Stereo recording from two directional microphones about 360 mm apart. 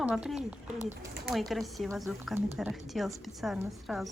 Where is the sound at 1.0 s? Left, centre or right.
Centre.